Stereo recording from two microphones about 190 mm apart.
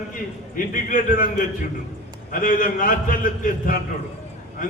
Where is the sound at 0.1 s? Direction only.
45° left (ahead or behind).